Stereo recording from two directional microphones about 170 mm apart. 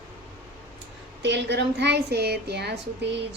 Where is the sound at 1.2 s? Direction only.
90° right.